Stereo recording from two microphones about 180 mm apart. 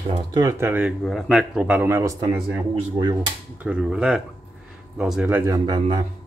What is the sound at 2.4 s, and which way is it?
Speech, 5° right (ahead or behind).